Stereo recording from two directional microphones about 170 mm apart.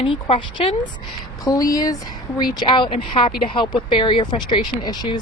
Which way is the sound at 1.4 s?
20° left (ahead or behind).